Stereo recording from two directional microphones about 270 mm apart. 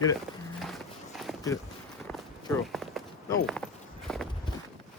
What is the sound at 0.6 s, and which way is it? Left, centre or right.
Walk, centre.